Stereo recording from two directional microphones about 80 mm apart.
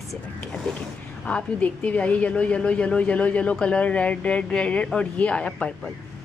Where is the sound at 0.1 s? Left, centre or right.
Centre.